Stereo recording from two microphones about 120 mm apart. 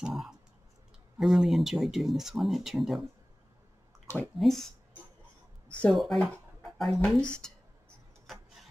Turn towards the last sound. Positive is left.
turn(degrees=5)  # may be behind; listen again after turning